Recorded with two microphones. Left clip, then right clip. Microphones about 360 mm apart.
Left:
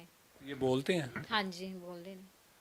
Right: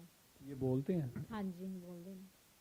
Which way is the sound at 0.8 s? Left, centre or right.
Centre.